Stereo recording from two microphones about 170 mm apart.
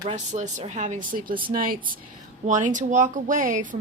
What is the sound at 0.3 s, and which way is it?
Speech, 45° right (ahead or behind).